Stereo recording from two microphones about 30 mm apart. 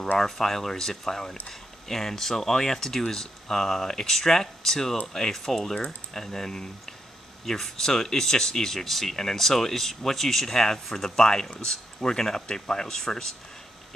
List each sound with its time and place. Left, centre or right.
0.2 s speech: centre